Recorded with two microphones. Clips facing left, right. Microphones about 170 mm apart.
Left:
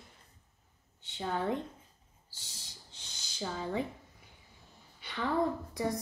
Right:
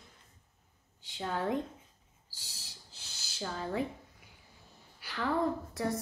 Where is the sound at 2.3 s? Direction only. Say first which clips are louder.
Even; 10° right (ahead or behind).